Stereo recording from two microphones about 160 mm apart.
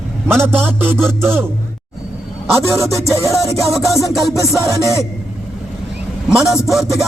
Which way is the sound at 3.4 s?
20° left (ahead or behind).